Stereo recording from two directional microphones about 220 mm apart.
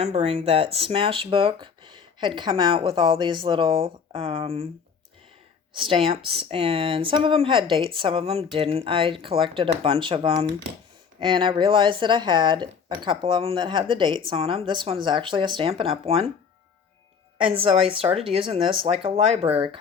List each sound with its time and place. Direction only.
0.0 s speech: 30° right (ahead or behind)
5.7 s speech: 25° right (ahead or behind)
17.6 s speech: 25° right (ahead or behind)